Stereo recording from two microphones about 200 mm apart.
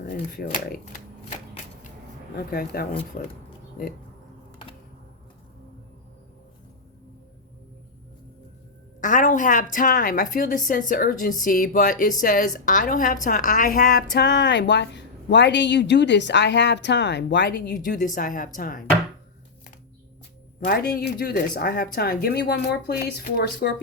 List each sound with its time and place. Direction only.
0.0 s speech: 45° left (ahead or behind)
2.5 s a woman's voice: 50° left (ahead or behind)
9.0 s a woman's voice: 40° left (ahead or behind)
14.2 s speech: 60° left (ahead or behind)
17.8 s a woman's voice: 40° left (ahead or behind)
20.7 s a woman's voice: 45° left (ahead or behind)